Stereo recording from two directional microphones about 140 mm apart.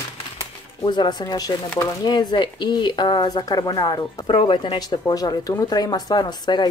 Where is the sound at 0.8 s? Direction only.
35° left (ahead or behind).